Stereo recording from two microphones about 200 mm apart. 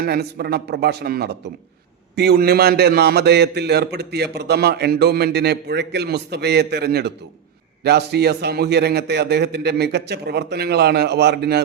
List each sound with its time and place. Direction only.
0.0 s a man's voice: 50° right (ahead or behind)